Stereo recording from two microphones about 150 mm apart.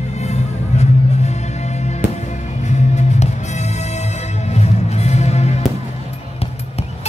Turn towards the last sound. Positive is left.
turn(degrees=45)  # may be behind; listen again after turning